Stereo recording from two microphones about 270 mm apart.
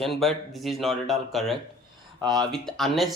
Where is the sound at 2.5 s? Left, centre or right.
Centre.